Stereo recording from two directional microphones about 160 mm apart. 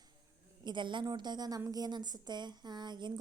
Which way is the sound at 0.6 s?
30° right (ahead or behind).